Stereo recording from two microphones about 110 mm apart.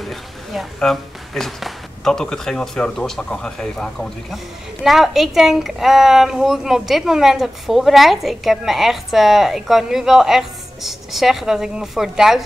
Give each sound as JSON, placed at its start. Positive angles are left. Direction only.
{"t": 0.0, "sound": "a woman's voice", "side_deg": 0}